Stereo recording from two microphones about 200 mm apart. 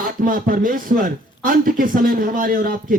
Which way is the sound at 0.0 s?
45° right (ahead or behind).